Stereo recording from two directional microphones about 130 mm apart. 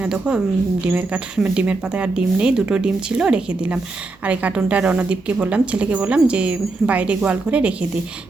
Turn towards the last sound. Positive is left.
turn(degrees=-10)  # may be behind; listen again after turning